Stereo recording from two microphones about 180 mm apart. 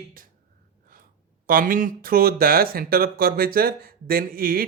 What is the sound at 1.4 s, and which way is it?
Speech, 50° right (ahead or behind).